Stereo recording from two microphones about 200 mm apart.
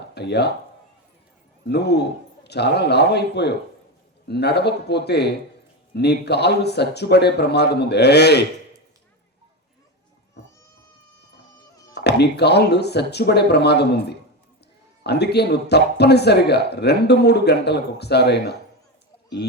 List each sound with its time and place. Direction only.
0.1 s speech: 55° left (ahead or behind)
1.6 s speech: 55° left (ahead or behind)
11.9 s speech: 55° left (ahead or behind)